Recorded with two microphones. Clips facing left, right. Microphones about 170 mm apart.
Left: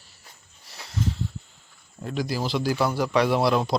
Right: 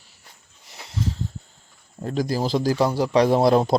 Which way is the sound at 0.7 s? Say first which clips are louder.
Right 1 dB; 20° right (ahead or behind).